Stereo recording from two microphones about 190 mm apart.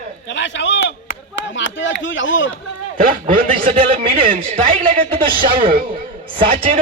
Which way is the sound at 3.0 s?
45° right (ahead or behind).